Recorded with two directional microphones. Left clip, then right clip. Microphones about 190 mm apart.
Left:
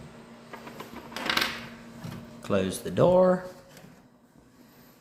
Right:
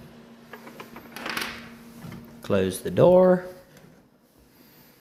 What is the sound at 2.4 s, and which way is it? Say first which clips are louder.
Speech: right 3 dB; 30° right (ahead or behind).